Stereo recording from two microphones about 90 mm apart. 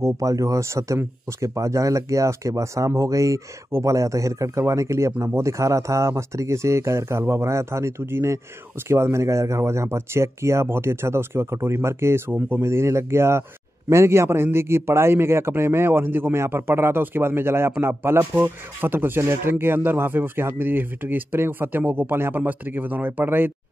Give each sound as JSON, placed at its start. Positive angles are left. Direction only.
{"t": 0.0, "sound": "a man's voice", "side_deg": -35}